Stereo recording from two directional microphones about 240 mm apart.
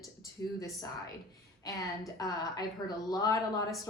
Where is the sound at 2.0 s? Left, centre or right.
Centre.